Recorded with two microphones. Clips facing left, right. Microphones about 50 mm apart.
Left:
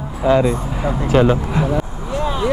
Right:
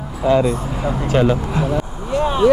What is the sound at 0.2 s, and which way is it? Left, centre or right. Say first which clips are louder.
Speech: left 1 dB; centre.